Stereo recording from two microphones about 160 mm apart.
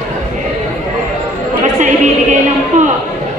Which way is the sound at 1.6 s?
50° right (ahead or behind).